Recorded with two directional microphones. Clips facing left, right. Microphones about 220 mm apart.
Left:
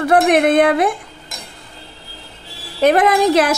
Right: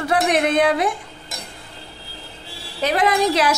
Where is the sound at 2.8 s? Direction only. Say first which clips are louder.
Left 6 dB; 50° left (ahead or behind).